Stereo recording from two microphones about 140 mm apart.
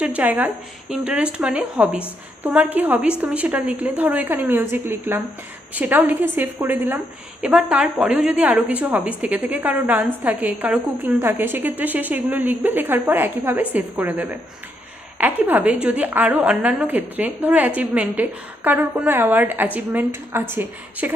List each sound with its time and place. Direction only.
0.0 s a woman's voice: 10° right (ahead or behind)